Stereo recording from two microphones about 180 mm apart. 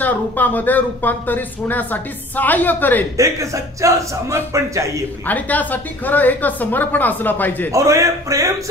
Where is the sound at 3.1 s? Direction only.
15° right (ahead or behind).